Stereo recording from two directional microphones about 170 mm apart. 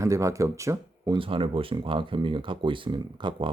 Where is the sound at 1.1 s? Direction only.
30° right (ahead or behind).